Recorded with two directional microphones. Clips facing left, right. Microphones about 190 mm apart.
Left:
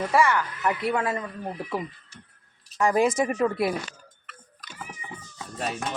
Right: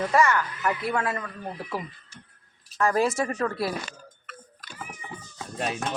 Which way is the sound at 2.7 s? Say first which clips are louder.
Left 2 dB; 15° left (ahead or behind).